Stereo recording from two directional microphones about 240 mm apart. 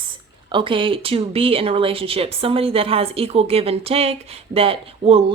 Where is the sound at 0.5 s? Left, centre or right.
Right.